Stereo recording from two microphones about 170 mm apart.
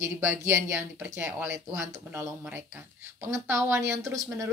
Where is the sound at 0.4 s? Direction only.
15° right (ahead or behind).